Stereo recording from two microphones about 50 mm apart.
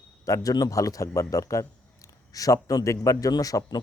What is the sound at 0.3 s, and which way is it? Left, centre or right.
Speech, left.